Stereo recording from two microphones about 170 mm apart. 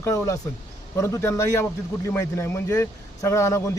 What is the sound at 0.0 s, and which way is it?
A man's voice, 20° left (ahead or behind).